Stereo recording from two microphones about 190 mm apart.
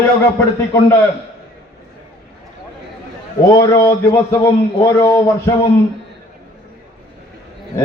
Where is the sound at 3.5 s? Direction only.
15° left (ahead or behind).